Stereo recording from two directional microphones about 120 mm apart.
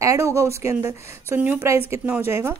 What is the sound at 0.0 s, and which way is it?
A woman's voice, 25° right (ahead or behind).